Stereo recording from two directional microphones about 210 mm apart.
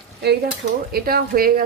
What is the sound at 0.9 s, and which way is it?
Speech, 45° right (ahead or behind).